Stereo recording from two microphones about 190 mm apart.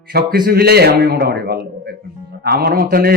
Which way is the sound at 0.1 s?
55° right (ahead or behind).